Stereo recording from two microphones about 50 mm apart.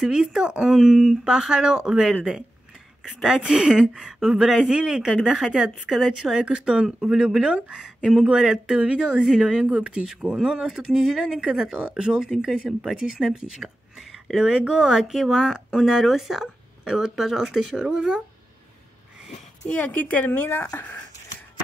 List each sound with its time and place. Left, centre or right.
0.0 s speech: centre
5.9 s a woman's voice: centre
6.4 s speech: right
19.7 s speech: left
20.2 s speech: left